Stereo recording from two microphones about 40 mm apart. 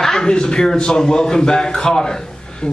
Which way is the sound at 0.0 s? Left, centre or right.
Centre.